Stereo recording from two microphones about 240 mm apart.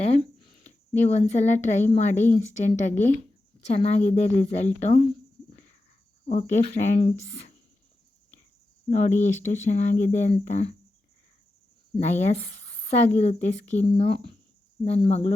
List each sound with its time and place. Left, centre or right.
0.0 s a sound: left
1.9 s a woman's voice: left
6.2 s speech: left
8.9 s speech: left
11.9 s speech: left